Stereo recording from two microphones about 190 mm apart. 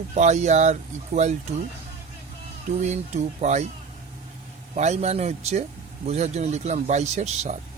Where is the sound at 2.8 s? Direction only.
35° right (ahead or behind).